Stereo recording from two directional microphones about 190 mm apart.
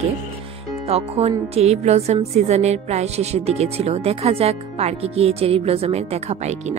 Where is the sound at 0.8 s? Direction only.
30° right (ahead or behind).